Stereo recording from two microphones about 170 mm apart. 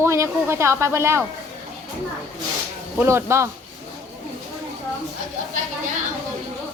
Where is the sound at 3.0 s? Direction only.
15° right (ahead or behind).